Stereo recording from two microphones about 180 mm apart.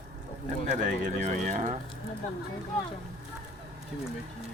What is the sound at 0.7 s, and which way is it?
Bird, 45° right (ahead or behind).